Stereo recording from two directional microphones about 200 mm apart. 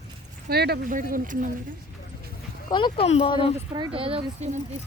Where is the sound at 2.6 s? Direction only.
25° left (ahead or behind).